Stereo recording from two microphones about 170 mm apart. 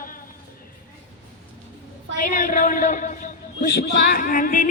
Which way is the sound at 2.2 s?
50° left (ahead or behind).